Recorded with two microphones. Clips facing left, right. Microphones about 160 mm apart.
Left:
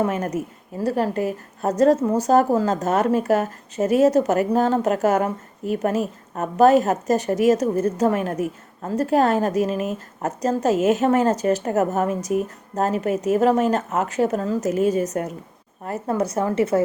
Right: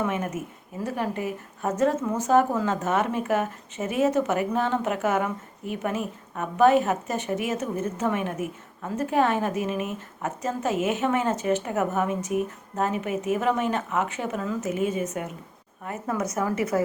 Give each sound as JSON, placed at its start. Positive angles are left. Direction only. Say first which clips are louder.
{"t": 0.0, "sound": "a woman's voice", "louder": "left 5 dB", "side_deg": 40}